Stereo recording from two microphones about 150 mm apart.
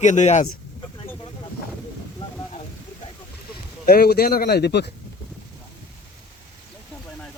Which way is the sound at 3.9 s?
90° left.